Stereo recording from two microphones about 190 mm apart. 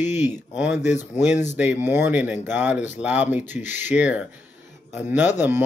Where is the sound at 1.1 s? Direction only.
40° left (ahead or behind).